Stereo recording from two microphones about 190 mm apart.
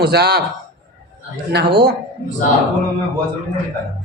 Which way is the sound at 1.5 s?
60° right (ahead or behind).